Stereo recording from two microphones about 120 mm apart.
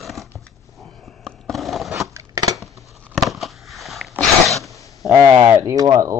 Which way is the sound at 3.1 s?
Centre (ahead or behind).